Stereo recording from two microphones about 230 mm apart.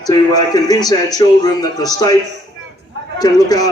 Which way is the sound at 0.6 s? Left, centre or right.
Centre.